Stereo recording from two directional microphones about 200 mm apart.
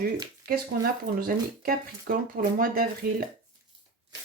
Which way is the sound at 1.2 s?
45° right (ahead or behind).